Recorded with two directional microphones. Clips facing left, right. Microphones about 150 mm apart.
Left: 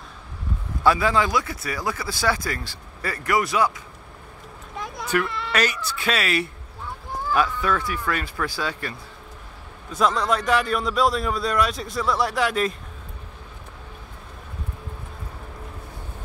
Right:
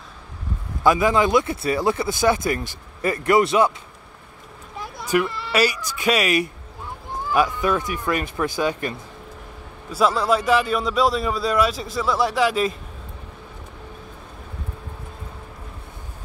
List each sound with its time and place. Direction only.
0.8 s speech: 15° right (ahead or behind)
4.7 s speech: 5° right (ahead or behind); by 8.9 s 20° right (ahead or behind)
9.8 s a man's voice: 5° right (ahead or behind)